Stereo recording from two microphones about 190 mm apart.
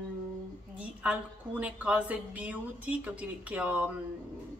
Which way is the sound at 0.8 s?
5° right (ahead or behind).